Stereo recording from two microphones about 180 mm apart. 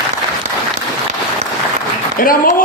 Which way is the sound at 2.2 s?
50° left (ahead or behind).